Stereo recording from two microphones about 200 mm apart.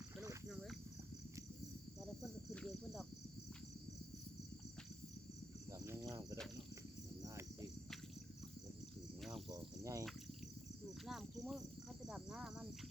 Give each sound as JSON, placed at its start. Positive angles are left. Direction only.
{"t": 0.4, "sound": "a sound", "side_deg": 0}
{"t": 2.0, "sound": "cricket", "side_deg": 0}
{"t": 5.8, "sound": "cricket", "side_deg": -15}
{"t": 9.5, "sound": "cricket", "side_deg": -15}
{"t": 11.0, "sound": "cricket", "side_deg": 0}